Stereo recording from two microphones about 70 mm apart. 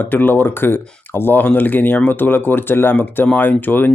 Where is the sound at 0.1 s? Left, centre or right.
Left.